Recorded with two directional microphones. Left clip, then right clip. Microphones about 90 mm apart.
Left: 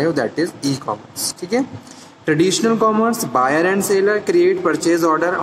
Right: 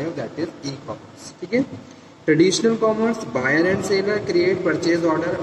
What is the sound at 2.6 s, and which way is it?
Speech, 40° left (ahead or behind).